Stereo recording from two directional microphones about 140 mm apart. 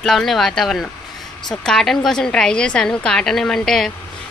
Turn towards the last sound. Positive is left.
turn(degrees=5)  # may be behind; listen again after turning